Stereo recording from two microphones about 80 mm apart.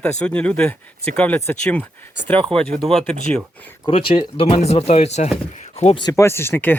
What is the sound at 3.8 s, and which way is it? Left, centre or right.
Speech, left.